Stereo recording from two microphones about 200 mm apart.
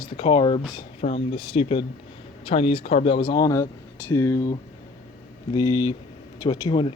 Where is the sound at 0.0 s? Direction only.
25° left (ahead or behind).